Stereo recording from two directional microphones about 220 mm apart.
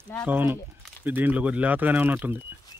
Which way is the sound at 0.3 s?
10° right (ahead or behind).